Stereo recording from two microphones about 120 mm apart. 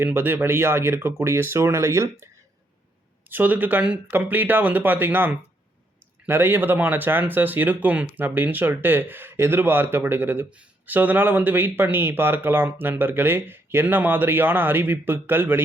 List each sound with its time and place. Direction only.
0.0 s speech: 15° right (ahead or behind)
3.2 s speech: 15° right (ahead or behind)